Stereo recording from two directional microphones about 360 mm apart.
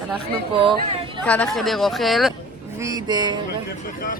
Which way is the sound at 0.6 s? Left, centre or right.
Centre.